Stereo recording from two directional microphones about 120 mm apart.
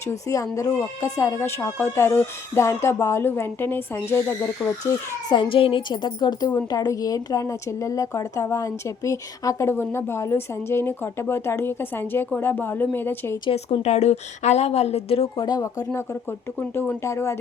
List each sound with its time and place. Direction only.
0.1 s speech: 25° left (ahead or behind)
5.3 s a woman's voice: 45° left (ahead or behind); by 13.4 s 20° left (ahead or behind)
13.7 s a woman's voice: 65° left (ahead or behind)
15.4 s a woman's voice: 30° left (ahead or behind)
16.6 s speech: 20° left (ahead or behind)